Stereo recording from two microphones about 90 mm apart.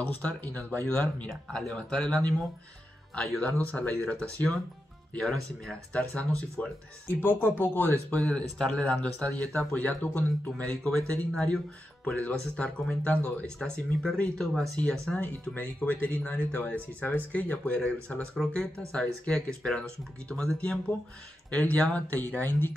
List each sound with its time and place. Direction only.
0.1 s speech: 15° left (ahead or behind)
5.2 s speech: 5° left (ahead or behind)
5.9 s speech: 15° left (ahead or behind)
7.2 s speech: 25° left (ahead or behind)
8.2 s speech: 10° left (ahead or behind)